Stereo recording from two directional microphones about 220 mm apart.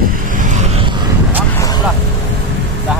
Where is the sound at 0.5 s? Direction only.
30° right (ahead or behind).